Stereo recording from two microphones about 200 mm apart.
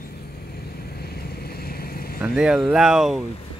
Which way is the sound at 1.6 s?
50° left (ahead or behind).